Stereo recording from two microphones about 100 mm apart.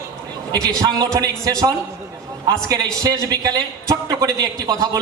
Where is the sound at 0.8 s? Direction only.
40° right (ahead or behind).